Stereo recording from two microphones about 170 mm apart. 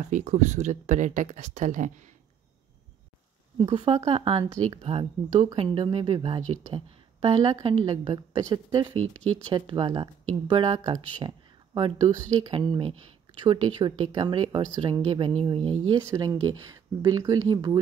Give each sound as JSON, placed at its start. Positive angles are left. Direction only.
{"t": 0.1, "sound": "speech", "side_deg": -45}
{"t": 3.5, "sound": "a woman's voice", "side_deg": -25}